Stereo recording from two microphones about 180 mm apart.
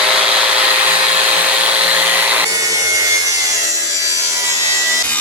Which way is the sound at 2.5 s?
20° right (ahead or behind).